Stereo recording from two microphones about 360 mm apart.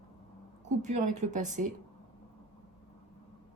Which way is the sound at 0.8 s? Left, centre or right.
Centre.